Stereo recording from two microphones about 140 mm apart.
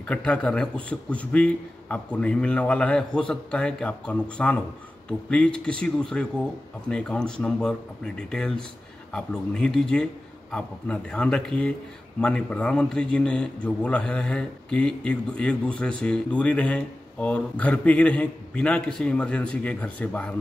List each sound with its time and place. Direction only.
0.1 s a man's voice: 10° left (ahead or behind)